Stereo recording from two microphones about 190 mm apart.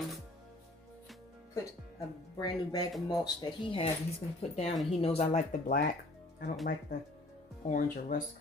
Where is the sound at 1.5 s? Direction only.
20° left (ahead or behind).